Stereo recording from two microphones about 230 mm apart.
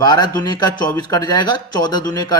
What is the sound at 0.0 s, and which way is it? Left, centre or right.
Speech, centre.